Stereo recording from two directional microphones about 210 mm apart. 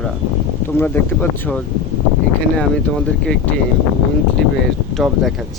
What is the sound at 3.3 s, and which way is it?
Speech, 5° left (ahead or behind).